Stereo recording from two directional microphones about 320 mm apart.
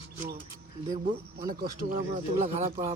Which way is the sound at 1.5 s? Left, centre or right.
Right.